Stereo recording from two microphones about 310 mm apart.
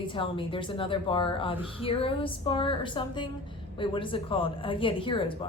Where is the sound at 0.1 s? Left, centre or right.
Centre.